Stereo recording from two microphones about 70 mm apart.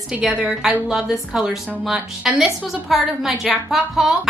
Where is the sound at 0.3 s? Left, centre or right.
Centre.